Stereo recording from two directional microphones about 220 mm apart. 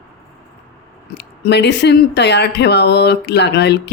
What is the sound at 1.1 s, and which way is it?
Speech, 50° left (ahead or behind).